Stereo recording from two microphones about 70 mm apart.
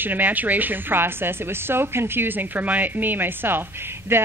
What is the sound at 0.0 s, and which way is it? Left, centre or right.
A woman's voice, right.